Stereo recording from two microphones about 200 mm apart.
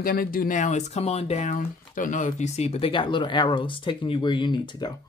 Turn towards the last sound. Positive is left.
turn(degrees=20)  # may be behind; listen again after turning